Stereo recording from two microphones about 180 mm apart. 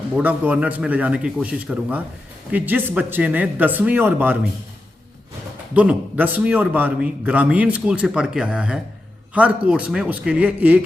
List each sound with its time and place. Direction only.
0.2 s a man's voice: 10° right (ahead or behind)
5.7 s a man's voice: 5° right (ahead or behind)